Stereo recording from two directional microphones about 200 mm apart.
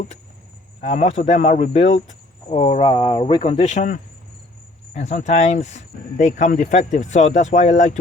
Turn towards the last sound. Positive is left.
turn(degrees=35)  # may be behind; listen again after turning